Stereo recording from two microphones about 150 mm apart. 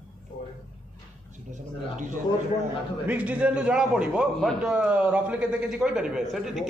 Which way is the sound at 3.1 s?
10° right (ahead or behind).